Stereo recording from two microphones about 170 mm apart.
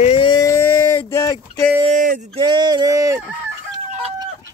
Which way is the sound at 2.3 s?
25° right (ahead or behind).